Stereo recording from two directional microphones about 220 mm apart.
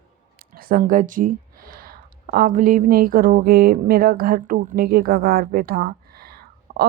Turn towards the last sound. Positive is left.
turn(degrees=-45)  # may be behind; listen again after turning